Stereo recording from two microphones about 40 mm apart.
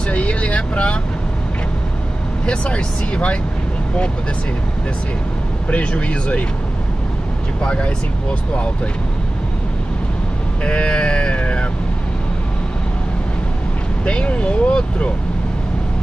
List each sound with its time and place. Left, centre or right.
0.1 s vehicle: left
2.4 s speech: left
5.7 s speech: left
7.6 s speech: left
10.6 s speech: left
14.0 s speech: left